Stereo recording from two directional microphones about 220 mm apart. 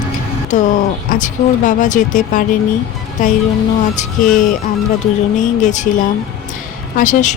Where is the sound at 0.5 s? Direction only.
35° left (ahead or behind).